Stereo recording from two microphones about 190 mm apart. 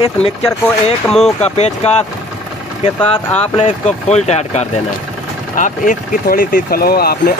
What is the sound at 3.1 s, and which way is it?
Speech, 35° left (ahead or behind).